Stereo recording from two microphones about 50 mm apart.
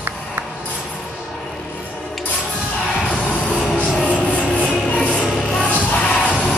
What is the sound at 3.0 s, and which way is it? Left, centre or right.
Music, left.